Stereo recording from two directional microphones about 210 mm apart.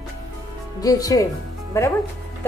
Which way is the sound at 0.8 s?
15° left (ahead or behind).